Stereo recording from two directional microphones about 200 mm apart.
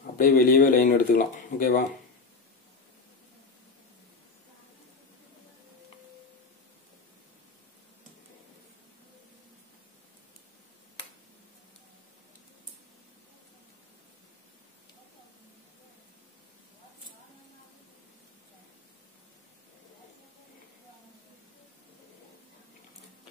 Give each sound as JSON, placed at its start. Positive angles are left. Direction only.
{"t": 0.0, "sound": "speech", "side_deg": 45}